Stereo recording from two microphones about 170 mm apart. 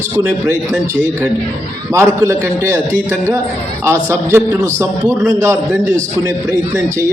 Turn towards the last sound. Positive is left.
turn(degrees=-20)  # may be behind; listen again after turning